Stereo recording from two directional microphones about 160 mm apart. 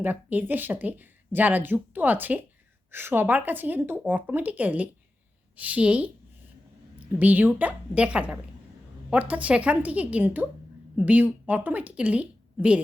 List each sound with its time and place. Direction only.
0.0 s speech: 10° right (ahead or behind)
7.2 s a woman's voice: 10° right (ahead or behind)